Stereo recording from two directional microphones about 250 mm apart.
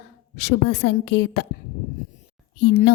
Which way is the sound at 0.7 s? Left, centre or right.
Left.